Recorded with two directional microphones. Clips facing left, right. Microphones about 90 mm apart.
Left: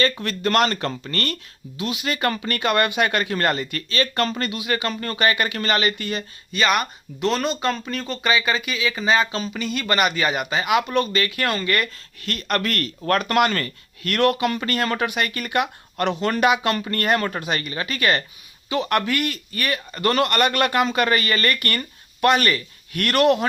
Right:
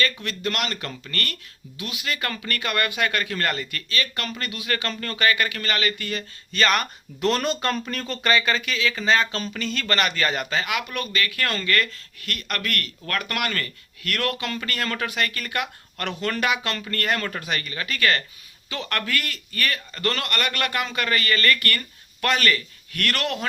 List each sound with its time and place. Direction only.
0.0 s speech: 40° left (ahead or behind); by 6.2 s 20° left (ahead or behind)
6.5 s speech: 10° left (ahead or behind)
10.8 s speech: 30° left (ahead or behind)